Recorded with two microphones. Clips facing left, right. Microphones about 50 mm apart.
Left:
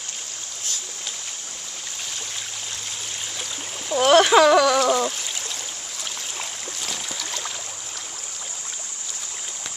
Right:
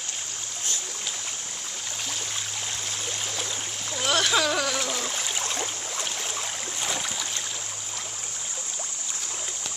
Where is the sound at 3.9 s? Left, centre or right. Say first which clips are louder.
Left 10 dB; left.